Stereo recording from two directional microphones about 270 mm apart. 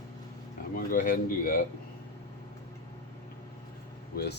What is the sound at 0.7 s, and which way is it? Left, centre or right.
Speech, left.